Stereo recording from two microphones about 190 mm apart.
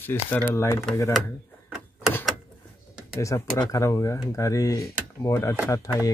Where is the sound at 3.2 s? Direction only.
15° left (ahead or behind).